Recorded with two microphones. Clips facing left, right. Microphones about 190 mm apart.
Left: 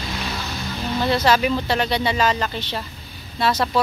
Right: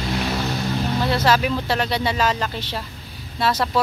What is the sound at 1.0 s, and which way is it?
Speech, 5° right (ahead or behind).